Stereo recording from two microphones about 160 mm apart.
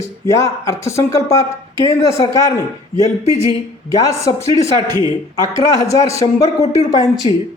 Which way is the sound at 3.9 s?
20° left (ahead or behind).